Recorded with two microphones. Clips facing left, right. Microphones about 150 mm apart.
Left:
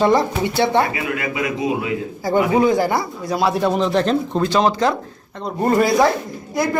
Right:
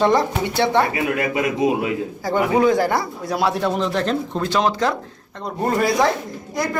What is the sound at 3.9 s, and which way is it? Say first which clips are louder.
Speech: left 4 dB; 25° left (ahead or behind).